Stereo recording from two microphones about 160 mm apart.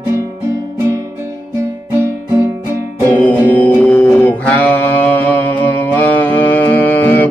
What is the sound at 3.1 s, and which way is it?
Music, 10° left (ahead or behind).